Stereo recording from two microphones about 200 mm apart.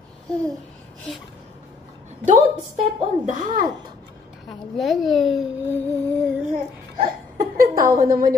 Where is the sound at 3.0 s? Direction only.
40° right (ahead or behind).